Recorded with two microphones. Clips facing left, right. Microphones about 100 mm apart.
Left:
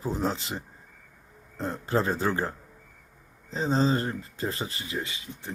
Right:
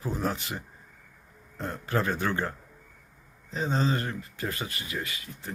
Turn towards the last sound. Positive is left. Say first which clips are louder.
# left 2 dB
turn(degrees=20)  # may be behind; listen again after turning